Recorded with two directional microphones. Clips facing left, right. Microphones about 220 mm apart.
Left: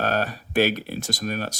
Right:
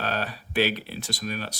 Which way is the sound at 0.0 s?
45° left (ahead or behind).